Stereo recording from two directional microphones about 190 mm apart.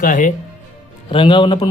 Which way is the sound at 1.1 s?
25° left (ahead or behind).